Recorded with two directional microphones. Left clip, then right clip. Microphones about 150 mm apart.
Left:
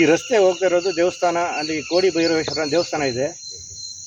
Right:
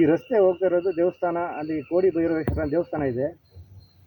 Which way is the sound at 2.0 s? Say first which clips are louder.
Left 3 dB; 50° left (ahead or behind).